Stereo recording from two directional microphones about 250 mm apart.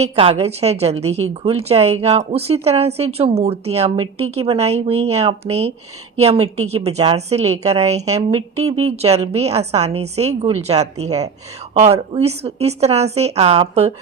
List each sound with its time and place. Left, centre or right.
0.0 s a woman's voice: right
8.4 s speech: right
8.8 s a woman's voice: right